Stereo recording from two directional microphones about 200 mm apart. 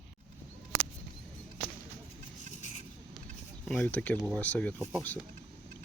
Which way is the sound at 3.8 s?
5° left (ahead or behind).